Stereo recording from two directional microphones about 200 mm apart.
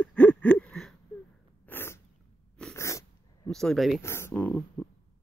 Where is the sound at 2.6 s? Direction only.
15° left (ahead or behind).